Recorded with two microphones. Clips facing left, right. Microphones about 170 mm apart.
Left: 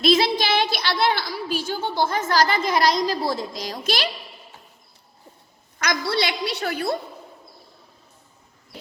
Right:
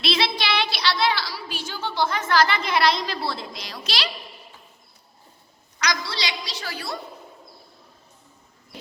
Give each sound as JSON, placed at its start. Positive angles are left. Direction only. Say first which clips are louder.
{"t": 0.0, "sound": "a woman's voice", "louder": "left 6 dB", "side_deg": 45}
{"t": 5.8, "sound": "a woman's voice", "louder": "left 5 dB", "side_deg": 55}